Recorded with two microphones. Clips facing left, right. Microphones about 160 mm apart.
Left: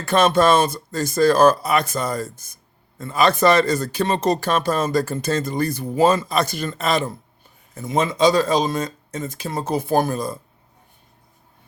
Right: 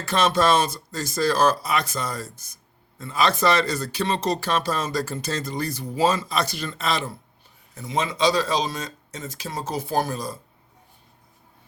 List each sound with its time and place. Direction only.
0.0 s speech: 55° left (ahead or behind)